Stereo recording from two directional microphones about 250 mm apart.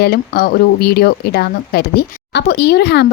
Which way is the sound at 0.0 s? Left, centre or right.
Left.